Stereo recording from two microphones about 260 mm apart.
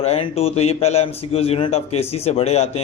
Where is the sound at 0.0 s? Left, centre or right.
Left.